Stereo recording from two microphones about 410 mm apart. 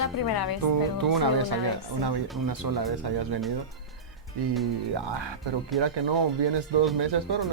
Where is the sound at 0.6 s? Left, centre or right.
Right.